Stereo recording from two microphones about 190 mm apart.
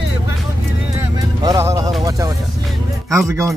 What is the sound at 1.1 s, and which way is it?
Music, 20° right (ahead or behind).